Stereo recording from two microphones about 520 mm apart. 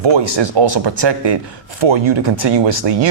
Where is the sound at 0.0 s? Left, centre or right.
Right.